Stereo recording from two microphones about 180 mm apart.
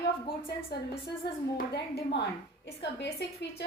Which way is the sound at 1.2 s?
65° left (ahead or behind).